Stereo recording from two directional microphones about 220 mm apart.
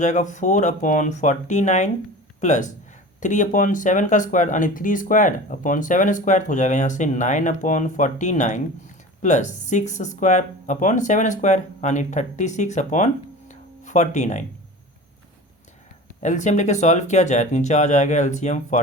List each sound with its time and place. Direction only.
0.0 s speech: 35° left (ahead or behind)
13.5 s music: 35° left (ahead or behind)
16.2 s speech: 35° left (ahead or behind)